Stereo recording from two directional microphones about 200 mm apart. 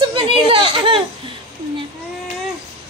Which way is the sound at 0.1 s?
25° right (ahead or behind).